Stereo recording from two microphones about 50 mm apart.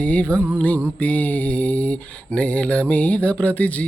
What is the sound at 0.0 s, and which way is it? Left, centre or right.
Mantra, left.